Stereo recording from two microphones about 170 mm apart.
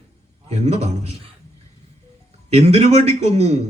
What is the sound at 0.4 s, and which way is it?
Speech, 40° right (ahead or behind).